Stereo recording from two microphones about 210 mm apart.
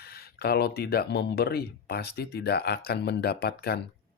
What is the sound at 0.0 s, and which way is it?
Speech, 45° left (ahead or behind).